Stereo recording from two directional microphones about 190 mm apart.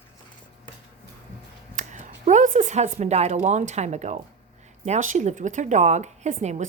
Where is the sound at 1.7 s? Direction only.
40° right (ahead or behind).